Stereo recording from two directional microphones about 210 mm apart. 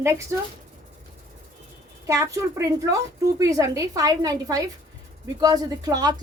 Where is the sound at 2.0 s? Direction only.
15° right (ahead or behind).